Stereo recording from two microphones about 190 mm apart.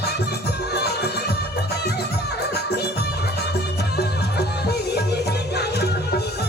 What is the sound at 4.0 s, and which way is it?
Music, 60° left (ahead or behind).